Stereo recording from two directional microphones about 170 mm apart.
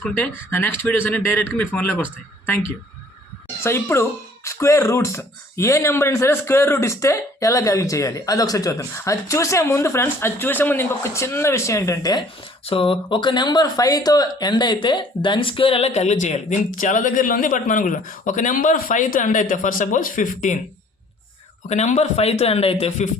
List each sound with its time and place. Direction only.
0.5 s speech: 15° left (ahead or behind)
3.6 s speech: 15° left (ahead or behind)
12.6 s speech: 35° left (ahead or behind)
21.7 s speech: 40° left (ahead or behind)